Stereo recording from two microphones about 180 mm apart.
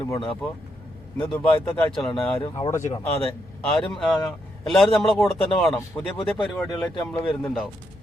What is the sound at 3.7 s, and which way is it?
A man's voice, centre (ahead or behind).